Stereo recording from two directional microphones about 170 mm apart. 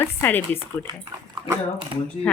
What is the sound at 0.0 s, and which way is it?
Speech, 10° left (ahead or behind).